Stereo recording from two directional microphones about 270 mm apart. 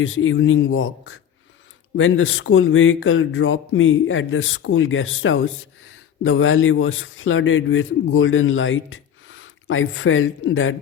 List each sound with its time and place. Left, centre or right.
0.0 s speech: left